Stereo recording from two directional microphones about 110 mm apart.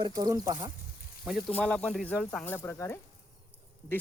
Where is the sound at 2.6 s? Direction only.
25° left (ahead or behind).